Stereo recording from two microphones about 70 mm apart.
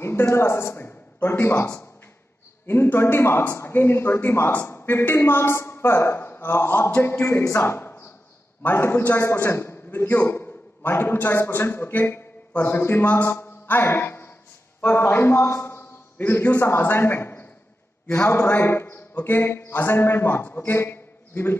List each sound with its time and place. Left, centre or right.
0.0 s a man's voice: left
0.8 s a sound: left
1.6 s a man's voice: left
16.2 s speech: left